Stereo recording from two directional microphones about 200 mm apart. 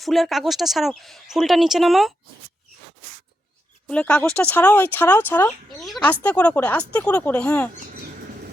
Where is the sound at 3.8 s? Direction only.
5° left (ahead or behind).